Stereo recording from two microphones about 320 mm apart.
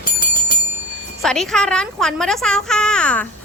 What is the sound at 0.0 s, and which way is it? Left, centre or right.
Bell, left.